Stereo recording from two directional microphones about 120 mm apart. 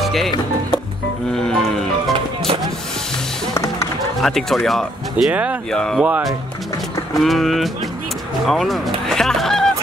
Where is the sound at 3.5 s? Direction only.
25° left (ahead or behind).